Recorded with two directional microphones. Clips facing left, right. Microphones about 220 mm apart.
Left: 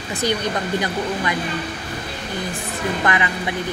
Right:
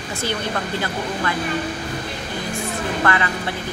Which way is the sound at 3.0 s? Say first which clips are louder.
Right 1 dB; 15° left (ahead or behind).